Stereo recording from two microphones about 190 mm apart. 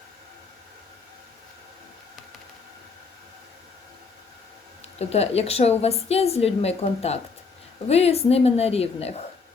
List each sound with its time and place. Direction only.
4.8 s a woman's voice: 35° left (ahead or behind)